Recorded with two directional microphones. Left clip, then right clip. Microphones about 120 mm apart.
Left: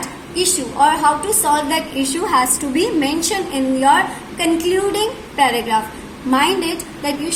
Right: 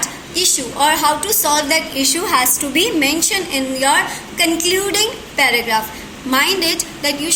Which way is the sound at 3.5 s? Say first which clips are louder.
Left 4 dB; 45° left (ahead or behind).